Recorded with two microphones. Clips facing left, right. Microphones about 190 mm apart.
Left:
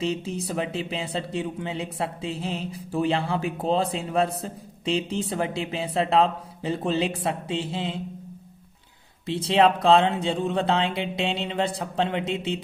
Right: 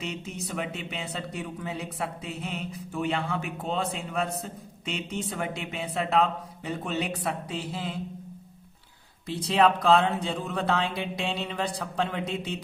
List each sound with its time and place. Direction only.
0.0 s speech: 30° left (ahead or behind)
9.2 s speech: 25° left (ahead or behind)